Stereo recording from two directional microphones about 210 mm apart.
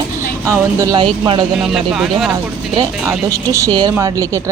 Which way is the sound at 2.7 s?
15° right (ahead or behind).